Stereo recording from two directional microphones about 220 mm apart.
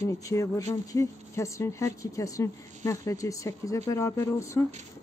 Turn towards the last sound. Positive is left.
turn(degrees=15)  # may be behind; listen again after turning